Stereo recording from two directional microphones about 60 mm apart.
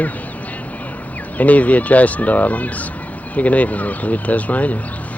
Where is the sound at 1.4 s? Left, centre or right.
Left.